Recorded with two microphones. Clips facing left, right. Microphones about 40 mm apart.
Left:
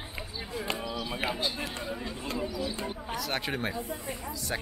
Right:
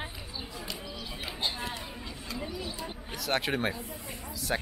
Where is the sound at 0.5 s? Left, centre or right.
Left.